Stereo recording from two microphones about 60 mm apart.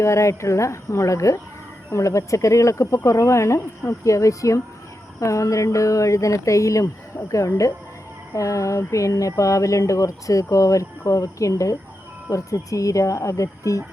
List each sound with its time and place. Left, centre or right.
0.0 s speech: left